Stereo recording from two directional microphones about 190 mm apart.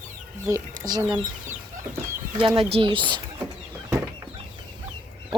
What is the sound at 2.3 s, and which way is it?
Speech, 25° right (ahead or behind).